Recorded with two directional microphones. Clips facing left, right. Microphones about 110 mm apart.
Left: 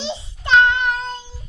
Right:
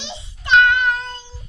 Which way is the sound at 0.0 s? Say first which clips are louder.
Left 6 dB; 25° left (ahead or behind).